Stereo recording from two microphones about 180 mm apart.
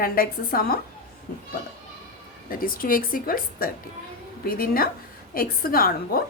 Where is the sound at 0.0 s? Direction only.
55° left (ahead or behind).